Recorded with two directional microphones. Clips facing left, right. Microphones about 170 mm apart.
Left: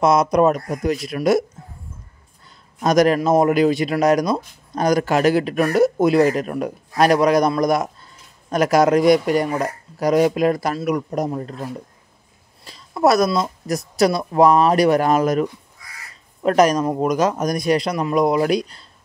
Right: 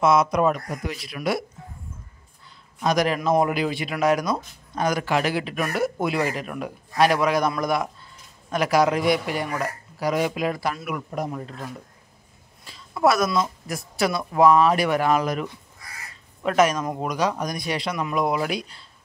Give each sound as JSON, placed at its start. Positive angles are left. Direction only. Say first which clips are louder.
{"t": 0.0, "sound": "speech", "louder": "left 4 dB", "side_deg": 40}
{"t": 2.8, "sound": "a man's voice", "louder": "left 7 dB", "side_deg": 45}